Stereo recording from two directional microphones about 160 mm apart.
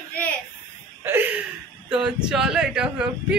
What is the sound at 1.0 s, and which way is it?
Laughter, 10° right (ahead or behind).